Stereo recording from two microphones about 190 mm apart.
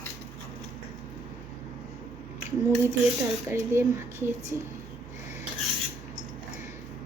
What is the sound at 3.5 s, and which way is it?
Speech, 15° right (ahead or behind).